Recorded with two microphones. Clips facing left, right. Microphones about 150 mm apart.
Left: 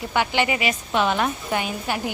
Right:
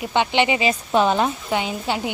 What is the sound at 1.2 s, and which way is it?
Speech, 20° right (ahead or behind).